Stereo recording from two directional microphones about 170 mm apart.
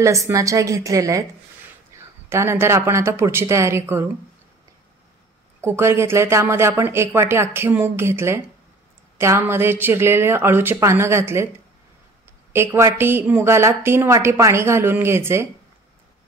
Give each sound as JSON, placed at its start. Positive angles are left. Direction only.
{"t": 0.0, "sound": "a woman's voice", "side_deg": -20}
{"t": 2.2, "sound": "a woman's voice", "side_deg": -15}
{"t": 5.6, "sound": "a woman's voice", "side_deg": -15}